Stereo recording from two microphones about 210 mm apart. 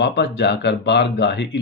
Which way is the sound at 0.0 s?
55° left (ahead or behind).